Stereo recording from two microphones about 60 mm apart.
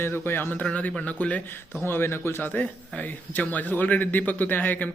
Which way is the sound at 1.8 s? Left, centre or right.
Left.